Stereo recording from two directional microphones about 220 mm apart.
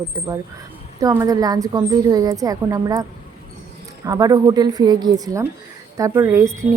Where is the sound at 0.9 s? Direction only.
15° right (ahead or behind).